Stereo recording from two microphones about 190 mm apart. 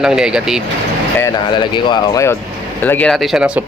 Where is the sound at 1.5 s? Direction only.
25° left (ahead or behind).